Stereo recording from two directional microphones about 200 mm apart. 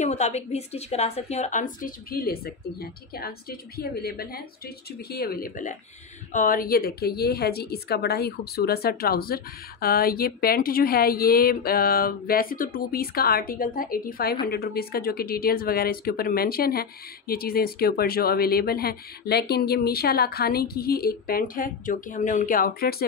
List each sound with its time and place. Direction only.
0.0 s a woman's voice: 35° left (ahead or behind)